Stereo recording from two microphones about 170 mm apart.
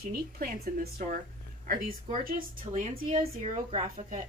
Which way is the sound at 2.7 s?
50° right (ahead or behind).